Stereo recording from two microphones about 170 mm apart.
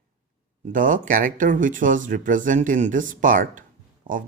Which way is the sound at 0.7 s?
50° right (ahead or behind).